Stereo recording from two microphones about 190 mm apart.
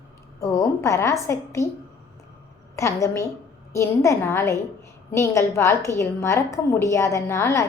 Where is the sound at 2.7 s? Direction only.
15° left (ahead or behind).